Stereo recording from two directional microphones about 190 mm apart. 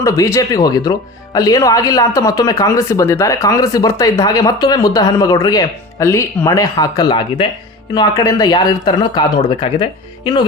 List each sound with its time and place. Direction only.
0.0 s speech: 15° left (ahead or behind)